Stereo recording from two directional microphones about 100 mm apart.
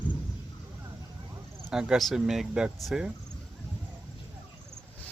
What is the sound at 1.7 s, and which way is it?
Speech, 5° right (ahead or behind).